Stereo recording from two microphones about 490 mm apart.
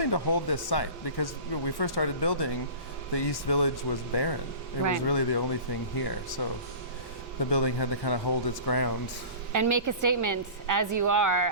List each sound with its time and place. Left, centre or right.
0.0 s speech: left
7.5 s speech: left
9.5 s a woman's voice: right